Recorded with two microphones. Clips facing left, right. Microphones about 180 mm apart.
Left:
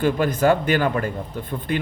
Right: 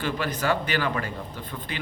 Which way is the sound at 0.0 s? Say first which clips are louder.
Left 9 dB; 50° left (ahead or behind).